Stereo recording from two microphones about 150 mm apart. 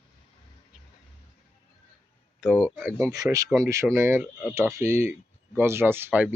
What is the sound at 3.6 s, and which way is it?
Speech, 20° right (ahead or behind).